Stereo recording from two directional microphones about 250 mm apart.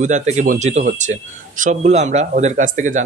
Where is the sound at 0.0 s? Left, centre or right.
Right.